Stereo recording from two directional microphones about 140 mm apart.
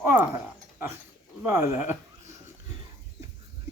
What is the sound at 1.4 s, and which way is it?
Speech, 15° right (ahead or behind).